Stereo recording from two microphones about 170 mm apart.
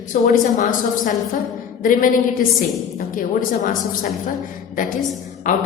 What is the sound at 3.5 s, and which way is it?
Speech, 55° left (ahead or behind).